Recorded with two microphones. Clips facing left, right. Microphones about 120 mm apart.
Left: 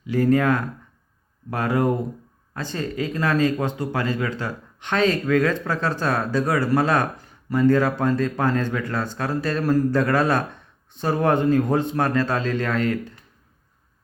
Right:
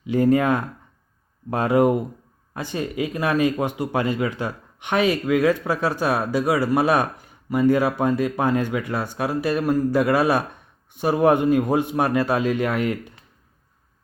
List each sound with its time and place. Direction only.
0.0 s speech: 20° right (ahead or behind)